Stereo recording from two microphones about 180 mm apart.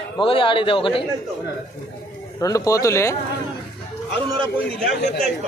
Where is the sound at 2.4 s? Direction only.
20° left (ahead or behind).